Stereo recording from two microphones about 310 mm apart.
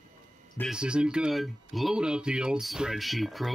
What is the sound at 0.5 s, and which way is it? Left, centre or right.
Speech, centre.